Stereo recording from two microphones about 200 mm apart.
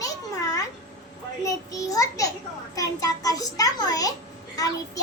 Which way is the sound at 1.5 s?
15° left (ahead or behind).